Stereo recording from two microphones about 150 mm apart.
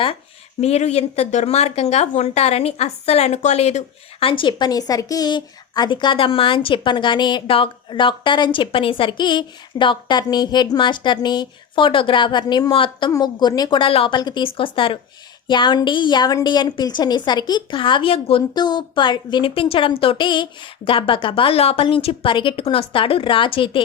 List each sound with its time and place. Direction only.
0.6 s speech: 45° left (ahead or behind)